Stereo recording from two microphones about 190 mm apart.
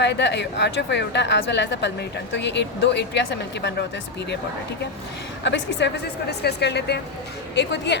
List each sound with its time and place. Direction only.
0.0 s a woman's voice: 65° left (ahead or behind)
5.4 s a woman's voice: 70° left (ahead or behind)